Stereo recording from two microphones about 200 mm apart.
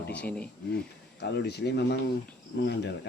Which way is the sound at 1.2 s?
55° left (ahead or behind).